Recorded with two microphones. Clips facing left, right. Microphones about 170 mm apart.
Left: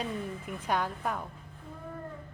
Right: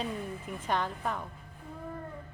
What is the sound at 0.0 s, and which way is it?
A woman's voice, 5° left (ahead or behind).